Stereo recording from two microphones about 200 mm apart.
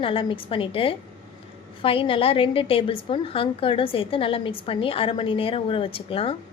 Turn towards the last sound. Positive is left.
turn(degrees=25)  # may be behind; listen again after turning